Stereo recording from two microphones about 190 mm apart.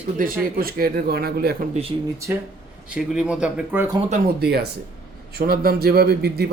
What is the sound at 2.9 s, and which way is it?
Speech, 5° right (ahead or behind).